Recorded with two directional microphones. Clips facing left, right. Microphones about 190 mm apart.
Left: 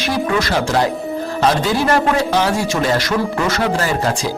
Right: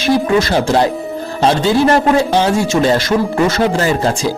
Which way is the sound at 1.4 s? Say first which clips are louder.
Right 5 dB; 25° right (ahead or behind).